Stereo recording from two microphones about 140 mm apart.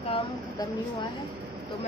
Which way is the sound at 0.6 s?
25° left (ahead or behind).